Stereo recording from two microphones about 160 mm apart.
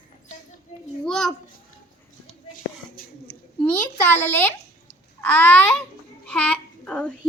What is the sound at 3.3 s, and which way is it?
A woman's voice, 10° left (ahead or behind).